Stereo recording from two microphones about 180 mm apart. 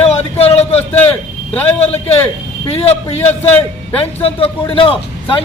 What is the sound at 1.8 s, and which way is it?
A man's voice, 35° left (ahead or behind).